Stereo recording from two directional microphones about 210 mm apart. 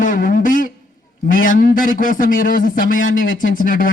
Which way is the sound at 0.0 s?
40° left (ahead or behind).